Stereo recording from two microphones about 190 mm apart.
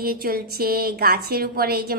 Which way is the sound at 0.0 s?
50° right (ahead or behind).